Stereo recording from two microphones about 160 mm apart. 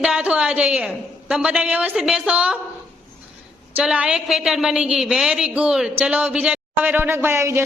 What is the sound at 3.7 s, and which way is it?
A woman's voice, 5° right (ahead or behind).